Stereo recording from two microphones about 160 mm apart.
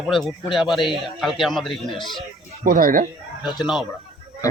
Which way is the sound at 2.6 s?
60° right (ahead or behind).